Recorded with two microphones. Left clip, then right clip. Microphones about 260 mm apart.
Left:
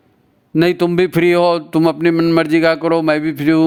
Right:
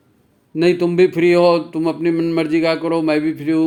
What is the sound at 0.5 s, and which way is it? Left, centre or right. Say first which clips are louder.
Speech: left 1 dB; left.